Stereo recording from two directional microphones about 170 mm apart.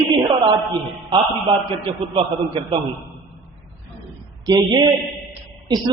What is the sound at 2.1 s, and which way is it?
Speech, 30° right (ahead or behind).